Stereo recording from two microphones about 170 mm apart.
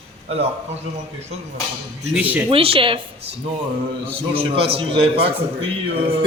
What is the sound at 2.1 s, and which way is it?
Speech, 10° right (ahead or behind).